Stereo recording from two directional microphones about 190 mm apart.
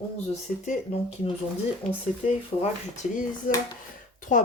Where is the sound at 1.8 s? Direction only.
5° left (ahead or behind).